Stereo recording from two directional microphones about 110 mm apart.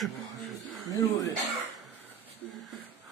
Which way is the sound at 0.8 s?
30° left (ahead or behind).